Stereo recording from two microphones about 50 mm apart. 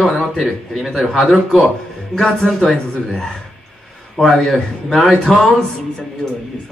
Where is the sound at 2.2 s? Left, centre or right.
Centre.